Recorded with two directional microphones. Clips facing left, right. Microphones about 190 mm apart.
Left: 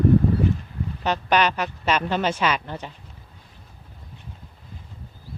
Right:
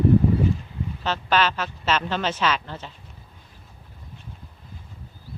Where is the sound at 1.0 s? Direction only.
15° left (ahead or behind).